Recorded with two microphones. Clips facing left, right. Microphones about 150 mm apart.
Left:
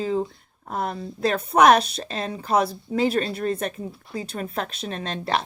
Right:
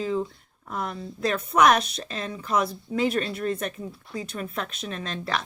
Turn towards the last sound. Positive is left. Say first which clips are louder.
# left 4 dB
turn(degrees=35)  # may be behind; listen again after turning